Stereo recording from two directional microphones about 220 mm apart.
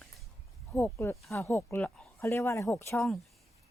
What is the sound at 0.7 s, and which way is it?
Speech, 10° left (ahead or behind).